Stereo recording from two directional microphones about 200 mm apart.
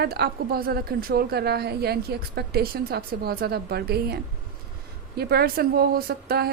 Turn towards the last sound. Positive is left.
turn(degrees=-50)  # may be behind; listen again after turning